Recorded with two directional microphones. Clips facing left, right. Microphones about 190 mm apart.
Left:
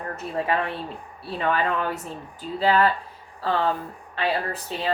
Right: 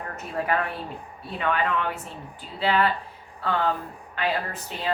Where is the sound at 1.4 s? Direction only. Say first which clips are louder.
Left 1 dB; 35° left (ahead or behind).